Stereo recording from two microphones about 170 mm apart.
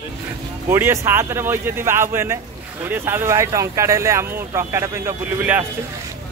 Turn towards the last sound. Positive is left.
turn(degrees=-10)  # may be behind; listen again after turning